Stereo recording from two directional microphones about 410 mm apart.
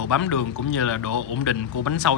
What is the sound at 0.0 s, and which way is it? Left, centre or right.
Speech, left.